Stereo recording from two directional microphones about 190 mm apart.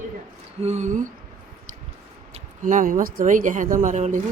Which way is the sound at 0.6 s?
35° right (ahead or behind).